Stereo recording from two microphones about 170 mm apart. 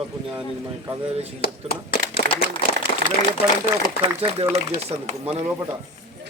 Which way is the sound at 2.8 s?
55° right (ahead or behind).